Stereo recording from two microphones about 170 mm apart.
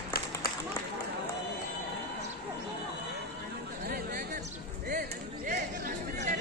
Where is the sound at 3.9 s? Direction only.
60° right (ahead or behind).